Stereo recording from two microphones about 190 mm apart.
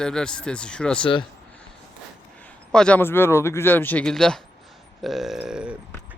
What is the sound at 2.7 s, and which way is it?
Speech, 5° left (ahead or behind).